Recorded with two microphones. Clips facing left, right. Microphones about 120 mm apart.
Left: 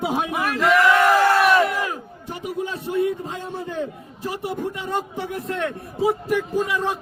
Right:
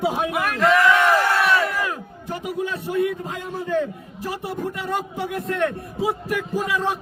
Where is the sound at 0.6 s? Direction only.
5° left (ahead or behind).